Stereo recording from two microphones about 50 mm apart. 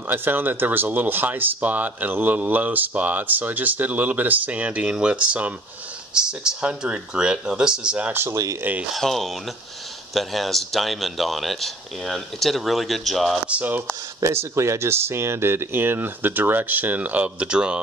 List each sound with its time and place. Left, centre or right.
0.1 s speech: right; by 8.0 s centre
8.9 s speech: centre
13.5 s speech: right
14.2 s speech: right